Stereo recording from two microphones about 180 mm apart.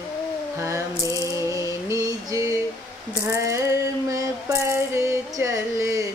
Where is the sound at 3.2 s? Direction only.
15° right (ahead or behind).